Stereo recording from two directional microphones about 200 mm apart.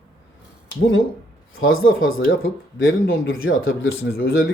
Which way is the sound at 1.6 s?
90° left.